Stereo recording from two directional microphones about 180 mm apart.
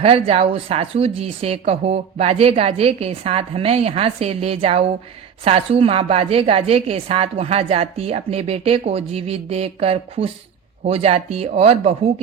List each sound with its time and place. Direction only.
0.0 s a woman's voice: 35° right (ahead or behind)